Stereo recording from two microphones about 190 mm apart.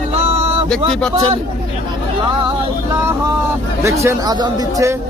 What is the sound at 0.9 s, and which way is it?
Speech, 5° left (ahead or behind).